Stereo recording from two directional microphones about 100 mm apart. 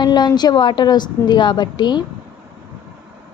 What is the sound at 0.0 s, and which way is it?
A woman's voice, 45° left (ahead or behind).